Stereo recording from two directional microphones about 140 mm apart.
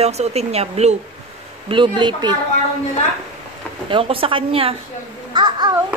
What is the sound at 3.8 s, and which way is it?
Speech, 40° right (ahead or behind).